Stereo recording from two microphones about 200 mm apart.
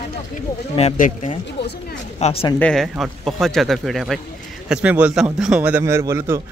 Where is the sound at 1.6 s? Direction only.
60° left (ahead or behind).